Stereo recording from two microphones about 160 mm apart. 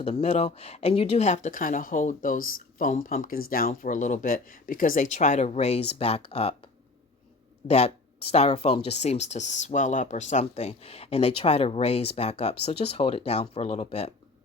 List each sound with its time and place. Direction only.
0.0 s speech: 45° left (ahead or behind)
7.7 s speech: 40° left (ahead or behind)